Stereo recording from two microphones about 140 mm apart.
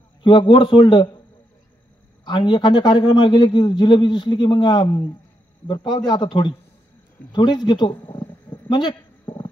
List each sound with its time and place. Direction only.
0.2 s a man's voice: 35° left (ahead or behind)
2.2 s a man's voice: 35° left (ahead or behind)
7.3 s a sound: 30° left (ahead or behind)